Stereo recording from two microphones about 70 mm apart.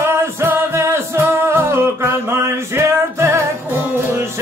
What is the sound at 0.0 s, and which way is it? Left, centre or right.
Music, right.